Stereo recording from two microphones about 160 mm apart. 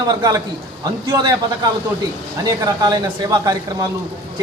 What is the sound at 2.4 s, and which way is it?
A man's voice, 25° right (ahead or behind).